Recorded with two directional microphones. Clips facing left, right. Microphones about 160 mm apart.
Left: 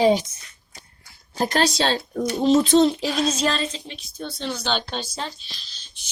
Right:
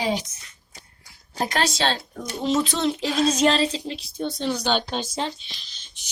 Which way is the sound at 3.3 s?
25° right (ahead or behind).